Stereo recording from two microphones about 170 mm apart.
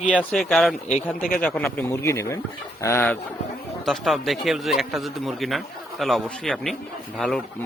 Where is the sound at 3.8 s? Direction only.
Centre (ahead or behind).